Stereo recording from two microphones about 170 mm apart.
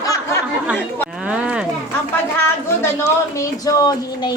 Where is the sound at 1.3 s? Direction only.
5° right (ahead or behind).